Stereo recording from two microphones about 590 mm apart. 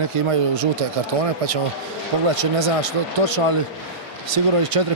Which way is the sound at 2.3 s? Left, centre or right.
Right.